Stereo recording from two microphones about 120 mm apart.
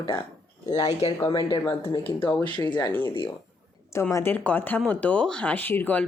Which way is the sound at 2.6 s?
35° left (ahead or behind).